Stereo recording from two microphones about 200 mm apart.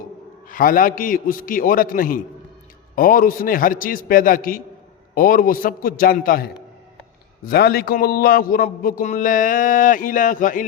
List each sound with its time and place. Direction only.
0.4 s a man's voice: 45° left (ahead or behind)